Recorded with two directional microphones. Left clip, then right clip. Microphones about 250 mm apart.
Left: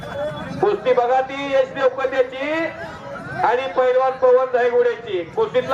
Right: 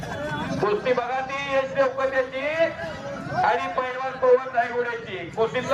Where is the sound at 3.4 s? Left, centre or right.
Left.